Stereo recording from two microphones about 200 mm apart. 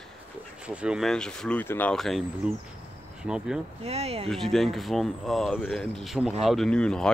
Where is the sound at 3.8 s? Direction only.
30° right (ahead or behind).